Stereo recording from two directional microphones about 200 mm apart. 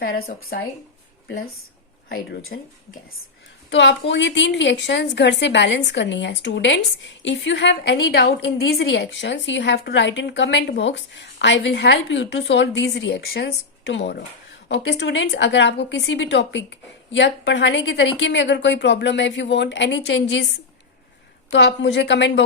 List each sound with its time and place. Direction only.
0.0 s speech: 50° left (ahead or behind)
2.0 s a woman's voice: 55° left (ahead or behind)
3.7 s a woman's voice: 65° left (ahead or behind)
21.5 s a woman's voice: 65° left (ahead or behind)